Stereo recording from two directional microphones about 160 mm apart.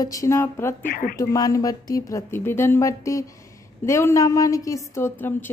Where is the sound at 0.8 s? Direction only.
65° left (ahead or behind).